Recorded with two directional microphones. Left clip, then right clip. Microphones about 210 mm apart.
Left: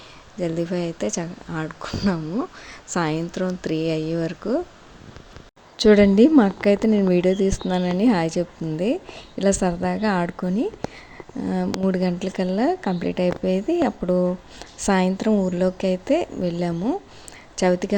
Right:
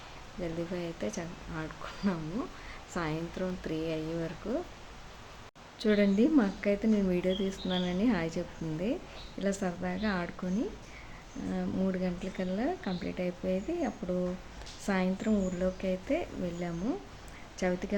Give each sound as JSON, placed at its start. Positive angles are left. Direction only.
{"t": 0.4, "sound": "a woman's voice", "side_deg": 35}
{"t": 5.7, "sound": "a woman's voice", "side_deg": 40}